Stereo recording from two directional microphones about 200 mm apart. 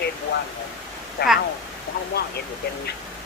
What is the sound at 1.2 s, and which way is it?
Speech, 50° left (ahead or behind).